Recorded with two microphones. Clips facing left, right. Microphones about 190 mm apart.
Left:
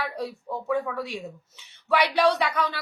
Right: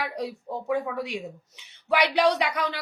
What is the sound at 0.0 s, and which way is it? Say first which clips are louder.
A woman's voice: even; 15° right (ahead or behind).